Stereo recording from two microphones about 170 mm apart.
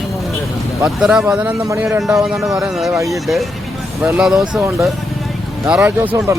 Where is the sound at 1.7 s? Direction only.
15° right (ahead or behind).